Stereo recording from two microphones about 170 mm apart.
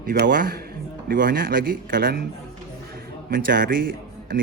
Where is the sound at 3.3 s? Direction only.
55° right (ahead or behind).